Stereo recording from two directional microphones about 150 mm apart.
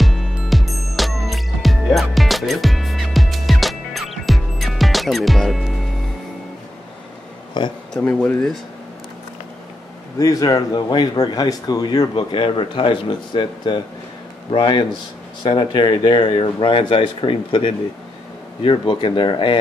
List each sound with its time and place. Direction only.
0.0 s music: centre (ahead or behind)
7.6 s speech: 30° left (ahead or behind)
7.9 s speech: 5° left (ahead or behind)
10.1 s speech: 25° left (ahead or behind)